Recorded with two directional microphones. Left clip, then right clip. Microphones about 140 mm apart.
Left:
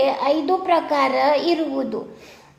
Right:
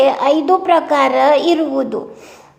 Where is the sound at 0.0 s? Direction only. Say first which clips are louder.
Right 6 dB; 25° right (ahead or behind).